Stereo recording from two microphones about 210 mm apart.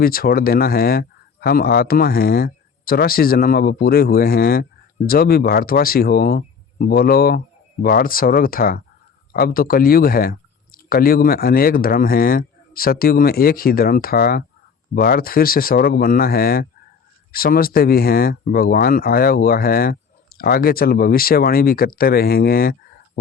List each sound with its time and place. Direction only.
0.0 s speech: 45° left (ahead or behind)